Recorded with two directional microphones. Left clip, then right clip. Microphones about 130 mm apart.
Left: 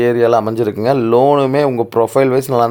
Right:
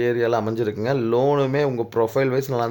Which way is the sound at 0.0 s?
35° left (ahead or behind).